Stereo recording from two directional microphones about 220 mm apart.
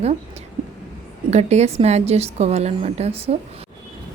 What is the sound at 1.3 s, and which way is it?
A woman's voice, 30° right (ahead or behind).